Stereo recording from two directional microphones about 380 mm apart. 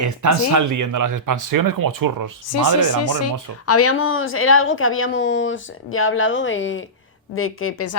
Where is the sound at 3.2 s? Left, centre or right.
Left.